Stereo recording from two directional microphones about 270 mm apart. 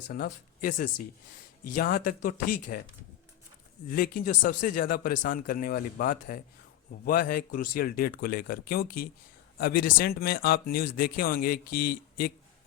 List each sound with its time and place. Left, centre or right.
0.1 s speech: left
3.8 s speech: left